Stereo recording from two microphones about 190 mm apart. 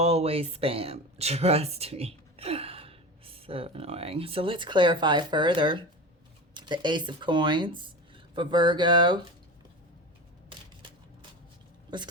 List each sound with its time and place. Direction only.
0.0 s speech: 35° right (ahead or behind)
11.9 s a woman's voice: 25° right (ahead or behind)